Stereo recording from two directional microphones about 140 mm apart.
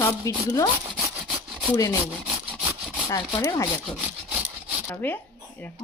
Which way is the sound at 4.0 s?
10° right (ahead or behind).